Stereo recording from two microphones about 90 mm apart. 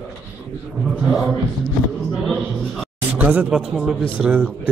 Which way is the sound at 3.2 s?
15° right (ahead or behind).